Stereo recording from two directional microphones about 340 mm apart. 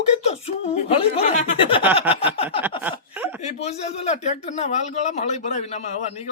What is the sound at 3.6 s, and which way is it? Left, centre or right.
Speech, centre.